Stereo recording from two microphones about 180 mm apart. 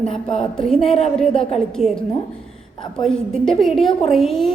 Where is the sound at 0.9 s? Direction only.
35° left (ahead or behind).